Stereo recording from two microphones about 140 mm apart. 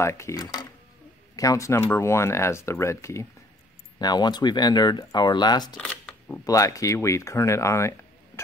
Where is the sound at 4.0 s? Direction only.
30° left (ahead or behind).